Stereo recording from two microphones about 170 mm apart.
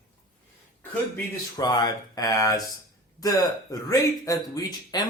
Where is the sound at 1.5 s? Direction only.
25° left (ahead or behind).